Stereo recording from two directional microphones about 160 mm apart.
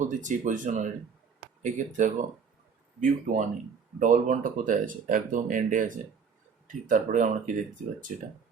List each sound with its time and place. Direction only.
0.0 s speech: 50° right (ahead or behind)